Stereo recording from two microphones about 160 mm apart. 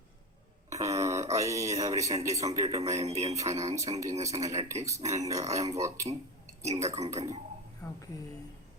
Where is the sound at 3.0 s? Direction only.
45° right (ahead or behind).